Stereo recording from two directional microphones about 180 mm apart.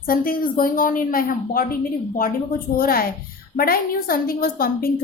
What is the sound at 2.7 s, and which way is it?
A woman's voice, 55° left (ahead or behind).